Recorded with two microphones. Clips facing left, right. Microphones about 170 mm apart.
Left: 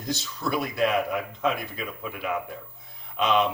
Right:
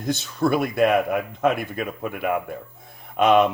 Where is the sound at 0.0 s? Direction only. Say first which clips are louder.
Right 8 dB; 55° right (ahead or behind).